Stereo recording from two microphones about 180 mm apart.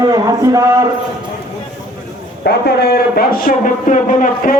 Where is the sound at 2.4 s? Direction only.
60° left (ahead or behind); by 4.5 s 45° left (ahead or behind).